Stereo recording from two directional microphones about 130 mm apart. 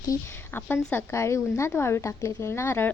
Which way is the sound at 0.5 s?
15° left (ahead or behind).